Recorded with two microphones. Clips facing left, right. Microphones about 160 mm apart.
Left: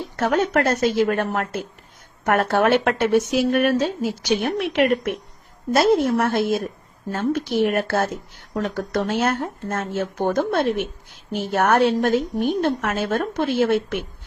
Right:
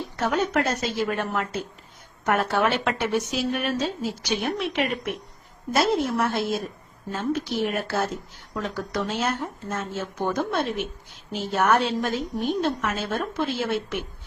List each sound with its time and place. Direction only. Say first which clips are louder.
0.2 s speech: left 4 dB; 60° left (ahead or behind)